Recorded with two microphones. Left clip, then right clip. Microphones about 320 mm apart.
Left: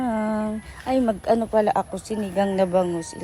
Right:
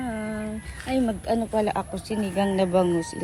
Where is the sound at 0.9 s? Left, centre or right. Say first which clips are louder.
Left 5 dB; centre.